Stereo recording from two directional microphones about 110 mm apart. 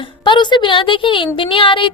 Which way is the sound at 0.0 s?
45° left (ahead or behind).